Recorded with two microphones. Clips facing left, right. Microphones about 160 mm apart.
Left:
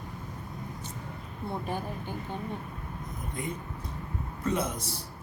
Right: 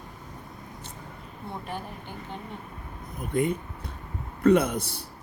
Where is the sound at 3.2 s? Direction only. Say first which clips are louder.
Right 11 dB; 65° right (ahead or behind).